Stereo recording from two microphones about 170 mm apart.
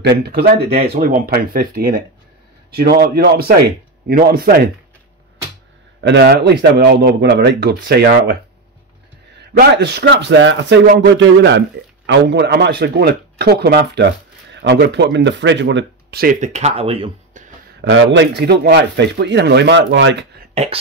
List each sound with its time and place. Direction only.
0.0 s speech: 65° right (ahead or behind)
5.9 s a man's voice: 80° right
9.5 s speech: 75° right (ahead or behind); by 17.5 s 40° right (ahead or behind)
18.1 s speech: 90° right
20.5 s a sound: 40° right (ahead or behind)